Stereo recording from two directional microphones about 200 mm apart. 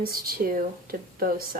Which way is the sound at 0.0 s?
45° right (ahead or behind).